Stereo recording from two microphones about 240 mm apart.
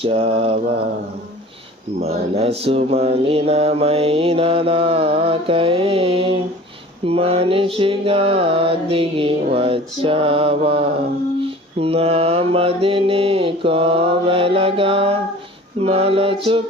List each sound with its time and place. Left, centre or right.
0.0 s mantra: right
2.0 s mantra: right